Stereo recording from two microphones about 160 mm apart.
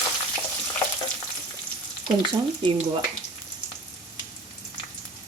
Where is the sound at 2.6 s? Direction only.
30° right (ahead or behind).